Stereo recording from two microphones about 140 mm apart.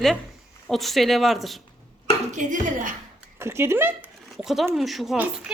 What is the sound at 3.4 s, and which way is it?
Speech, 20° right (ahead or behind).